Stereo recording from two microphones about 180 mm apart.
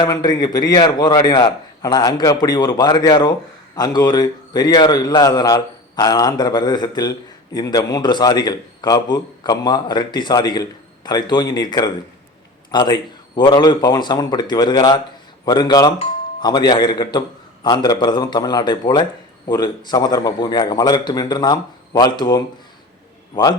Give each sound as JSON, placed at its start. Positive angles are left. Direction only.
{"t": 0.0, "sound": "a man's voice", "side_deg": 25}